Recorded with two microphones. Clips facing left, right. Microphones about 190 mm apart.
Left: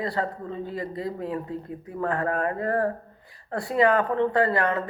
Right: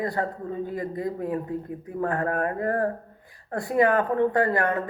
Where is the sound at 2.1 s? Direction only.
50° right (ahead or behind).